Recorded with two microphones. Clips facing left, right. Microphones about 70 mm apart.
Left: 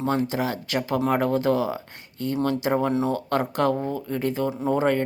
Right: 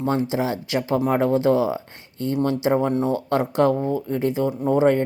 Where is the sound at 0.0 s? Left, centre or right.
Right.